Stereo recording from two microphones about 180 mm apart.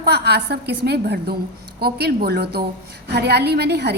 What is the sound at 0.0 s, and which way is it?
A woman's voice, 65° right (ahead or behind).